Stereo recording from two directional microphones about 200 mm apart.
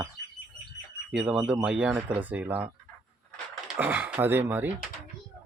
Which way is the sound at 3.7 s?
10° right (ahead or behind).